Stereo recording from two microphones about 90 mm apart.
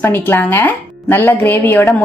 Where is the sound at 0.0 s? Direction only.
25° left (ahead or behind).